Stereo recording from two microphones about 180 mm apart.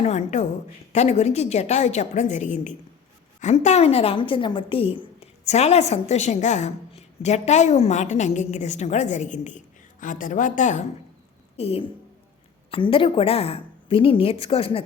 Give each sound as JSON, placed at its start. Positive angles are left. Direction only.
{"t": 0.0, "sound": "a woman's voice", "side_deg": 40}